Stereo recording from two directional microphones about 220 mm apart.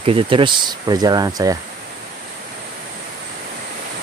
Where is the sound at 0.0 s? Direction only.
25° right (ahead or behind).